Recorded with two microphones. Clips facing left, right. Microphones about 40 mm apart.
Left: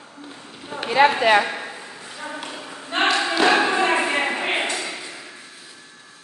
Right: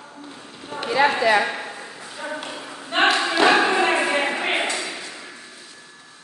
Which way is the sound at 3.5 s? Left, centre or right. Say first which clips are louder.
Even; centre.